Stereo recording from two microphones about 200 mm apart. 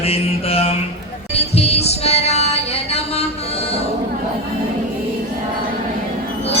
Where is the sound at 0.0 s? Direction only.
30° left (ahead or behind).